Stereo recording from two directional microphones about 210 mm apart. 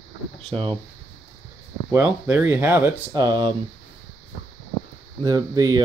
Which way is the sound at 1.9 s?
10° right (ahead or behind).